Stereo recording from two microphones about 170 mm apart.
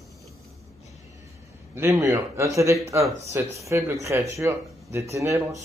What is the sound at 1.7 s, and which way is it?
Speech, 15° right (ahead or behind).